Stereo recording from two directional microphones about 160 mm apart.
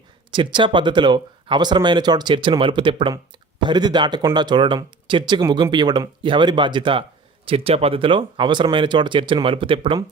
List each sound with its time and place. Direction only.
0.3 s speech: 30° right (ahead or behind)